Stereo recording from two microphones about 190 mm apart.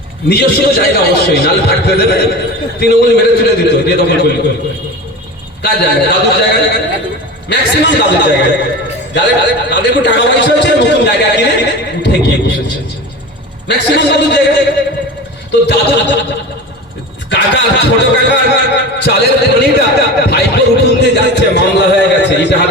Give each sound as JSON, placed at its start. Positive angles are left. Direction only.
{"t": 0.3, "sound": "speech", "side_deg": 60}
{"t": 5.6, "sound": "speech", "side_deg": 60}
{"t": 15.6, "sound": "speech", "side_deg": 60}
{"t": 17.2, "sound": "speech", "side_deg": 65}
{"t": 21.3, "sound": "a sound", "side_deg": 65}